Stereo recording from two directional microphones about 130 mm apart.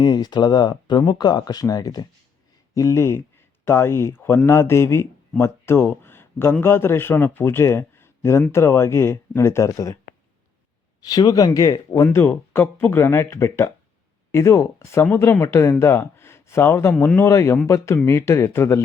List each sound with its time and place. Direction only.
0.0 s a man's voice: 35° left (ahead or behind)
11.0 s speech: 30° left (ahead or behind)
12.0 s speech: 15° left (ahead or behind)